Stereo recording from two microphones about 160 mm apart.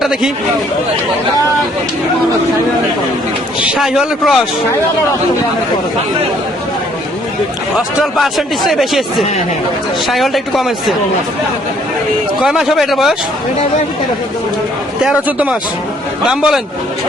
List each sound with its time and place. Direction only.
0.0 s speech: 5° right (ahead or behind)
3.7 s a man's voice: 5° right (ahead or behind)
7.8 s a man's voice: centre (ahead or behind)
10.1 s a man's voice: centre (ahead or behind)
12.4 s a man's voice: centre (ahead or behind)
15.0 s a man's voice: 5° right (ahead or behind)